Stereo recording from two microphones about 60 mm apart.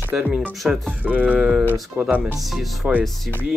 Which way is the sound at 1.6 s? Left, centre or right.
Right.